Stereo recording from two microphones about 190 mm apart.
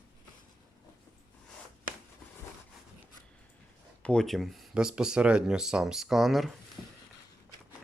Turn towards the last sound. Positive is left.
turn(degrees=0)  # may be behind; listen again after turning